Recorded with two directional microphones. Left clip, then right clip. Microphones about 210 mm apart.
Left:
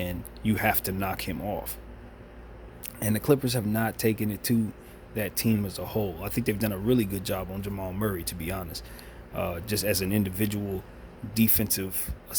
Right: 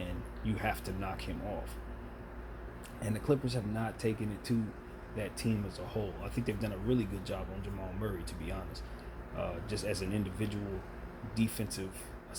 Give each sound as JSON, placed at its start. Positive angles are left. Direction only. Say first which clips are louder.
{"t": 0.0, "sound": "speech", "louder": "left 9 dB", "side_deg": 50}
{"t": 3.0, "sound": "speech", "louder": "left 8 dB", "side_deg": 50}